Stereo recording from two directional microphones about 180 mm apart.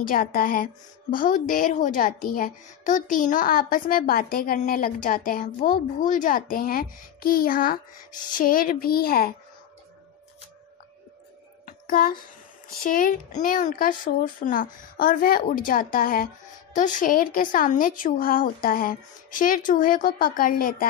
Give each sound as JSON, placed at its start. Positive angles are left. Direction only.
{"t": 0.0, "sound": "a child's voice", "side_deg": 50}
{"t": 11.6, "sound": "a sound", "side_deg": 50}
{"t": 12.8, "sound": "a child's voice", "side_deg": 50}